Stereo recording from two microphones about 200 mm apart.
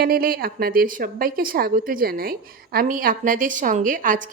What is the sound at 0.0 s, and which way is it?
A woman's voice, 50° right (ahead or behind).